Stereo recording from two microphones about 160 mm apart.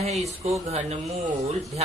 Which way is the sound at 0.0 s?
45° right (ahead or behind).